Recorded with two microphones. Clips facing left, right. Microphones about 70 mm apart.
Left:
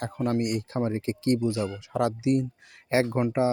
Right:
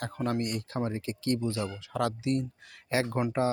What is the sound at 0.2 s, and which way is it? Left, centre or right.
Speech, centre.